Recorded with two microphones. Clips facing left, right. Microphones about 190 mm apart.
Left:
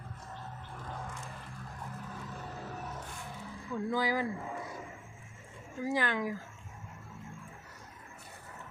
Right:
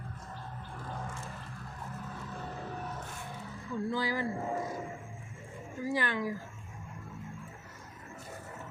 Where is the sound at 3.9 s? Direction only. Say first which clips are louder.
Left 3 dB; 15° left (ahead or behind).